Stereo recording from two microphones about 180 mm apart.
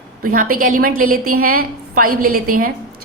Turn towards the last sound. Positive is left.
turn(degrees=-50)  # may be behind; listen again after turning